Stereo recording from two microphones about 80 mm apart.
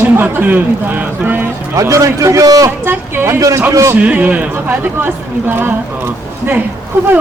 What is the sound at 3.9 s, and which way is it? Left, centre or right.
A woman's voice, centre.